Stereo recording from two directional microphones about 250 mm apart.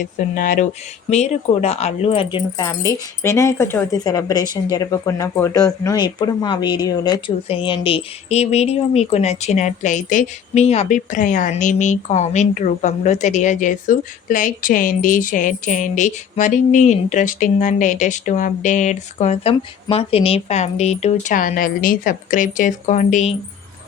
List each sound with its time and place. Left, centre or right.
0.0 s speech: left